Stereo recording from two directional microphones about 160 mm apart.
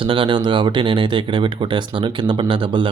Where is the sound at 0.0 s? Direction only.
30° right (ahead or behind).